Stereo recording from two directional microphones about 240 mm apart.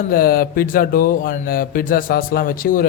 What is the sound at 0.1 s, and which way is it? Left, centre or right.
Speech, left.